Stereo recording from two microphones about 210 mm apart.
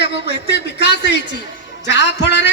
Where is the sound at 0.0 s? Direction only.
55° left (ahead or behind).